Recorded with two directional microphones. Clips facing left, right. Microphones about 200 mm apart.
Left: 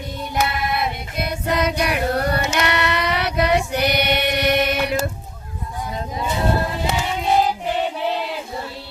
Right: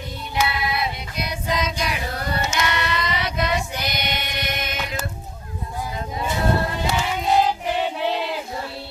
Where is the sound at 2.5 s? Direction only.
65° left (ahead or behind).